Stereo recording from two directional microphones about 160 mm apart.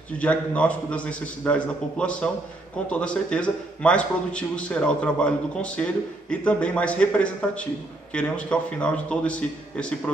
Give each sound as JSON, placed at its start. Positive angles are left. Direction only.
{"t": 0.2, "sound": "a man's voice", "side_deg": 10}